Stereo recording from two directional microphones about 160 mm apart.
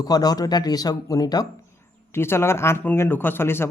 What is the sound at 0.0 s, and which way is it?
Speech, 25° left (ahead or behind).